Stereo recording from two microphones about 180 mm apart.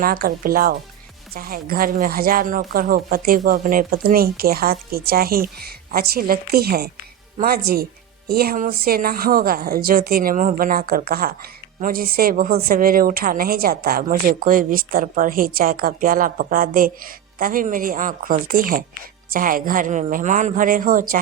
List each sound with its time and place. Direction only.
0.0 s a woman's voice: 50° right (ahead or behind)